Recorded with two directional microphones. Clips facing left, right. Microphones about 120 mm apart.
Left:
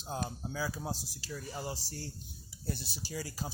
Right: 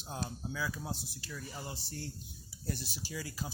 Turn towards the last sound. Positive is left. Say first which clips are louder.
# left 1 dB
turn(degrees=35)  # may be behind; listen again after turning